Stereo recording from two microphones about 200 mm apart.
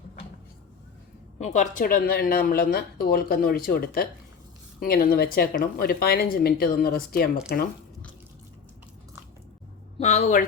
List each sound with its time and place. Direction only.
1.4 s speech: 35° left (ahead or behind)
10.0 s a woman's voice: 30° left (ahead or behind)